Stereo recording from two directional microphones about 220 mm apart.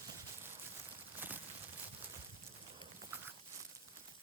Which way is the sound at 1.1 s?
10° right (ahead or behind).